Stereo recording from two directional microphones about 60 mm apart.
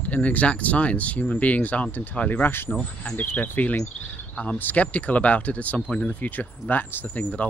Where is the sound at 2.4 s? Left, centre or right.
Left.